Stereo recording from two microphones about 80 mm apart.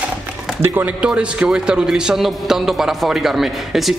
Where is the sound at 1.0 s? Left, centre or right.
Centre.